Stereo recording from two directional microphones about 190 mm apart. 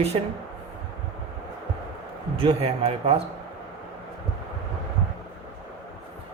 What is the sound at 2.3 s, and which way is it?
Speech, 30° right (ahead or behind).